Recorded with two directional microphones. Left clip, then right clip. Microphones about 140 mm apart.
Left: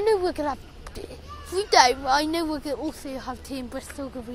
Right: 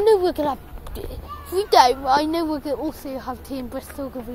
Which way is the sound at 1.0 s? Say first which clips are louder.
Right 6 dB; centre (ahead or behind).